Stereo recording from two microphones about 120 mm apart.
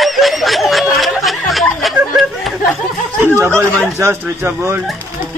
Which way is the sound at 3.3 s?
20° right (ahead or behind).